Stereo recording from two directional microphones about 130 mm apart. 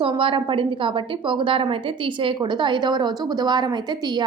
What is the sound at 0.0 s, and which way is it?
A woman's voice, 40° right (ahead or behind).